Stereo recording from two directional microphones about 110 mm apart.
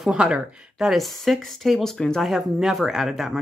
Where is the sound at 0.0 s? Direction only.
5° right (ahead or behind).